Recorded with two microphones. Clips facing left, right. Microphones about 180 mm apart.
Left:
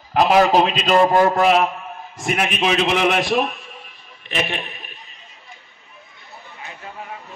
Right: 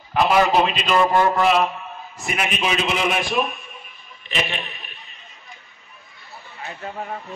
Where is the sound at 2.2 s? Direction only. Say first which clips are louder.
Left 4 dB; 65° left (ahead or behind).